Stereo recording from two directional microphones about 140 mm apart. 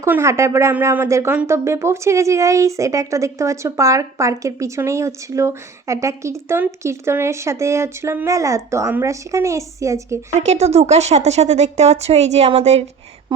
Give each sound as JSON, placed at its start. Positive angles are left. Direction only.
{"t": 0.0, "sound": "speech", "side_deg": -20}
{"t": 10.3, "sound": "speech", "side_deg": -55}